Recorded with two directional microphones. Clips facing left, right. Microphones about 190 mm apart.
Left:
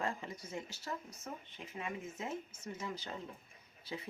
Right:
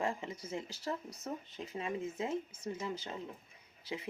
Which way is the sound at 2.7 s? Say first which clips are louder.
Right 5 dB; 30° right (ahead or behind).